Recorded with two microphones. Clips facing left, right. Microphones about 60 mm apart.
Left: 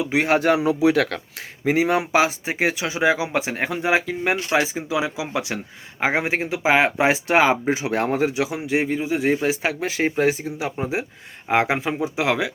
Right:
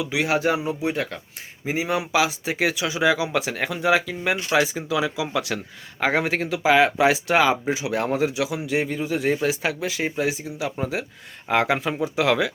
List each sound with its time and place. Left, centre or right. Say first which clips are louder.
0.0 s speech: left 3 dB; left
0.6 s a man's voice: left 7 dB; left
1.6 s speech: left 5 dB; left
2.2 s speech: left 1 dB; left
10.8 s speech: left 2 dB; left